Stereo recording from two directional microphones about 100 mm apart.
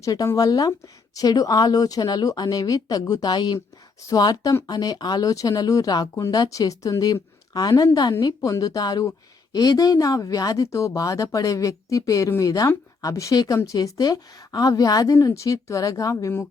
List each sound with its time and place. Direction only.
0.0 s speech: 35° left (ahead or behind)